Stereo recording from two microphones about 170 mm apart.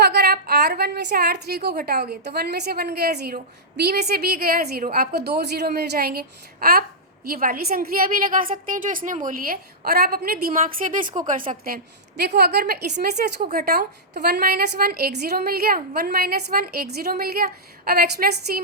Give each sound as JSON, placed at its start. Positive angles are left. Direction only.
{"t": 0.0, "sound": "a woman's voice", "side_deg": -70}
{"t": 12.4, "sound": "a woman's voice", "side_deg": -70}